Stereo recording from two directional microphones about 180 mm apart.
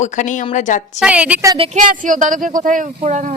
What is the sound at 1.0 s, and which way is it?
Speech, 5° right (ahead or behind).